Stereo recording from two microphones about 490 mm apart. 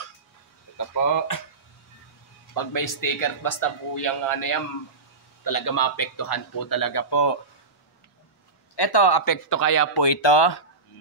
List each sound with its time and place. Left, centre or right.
0.7 s speech: left
2.5 s a man's voice: left
8.7 s a man's voice: left
10.0 s speech: left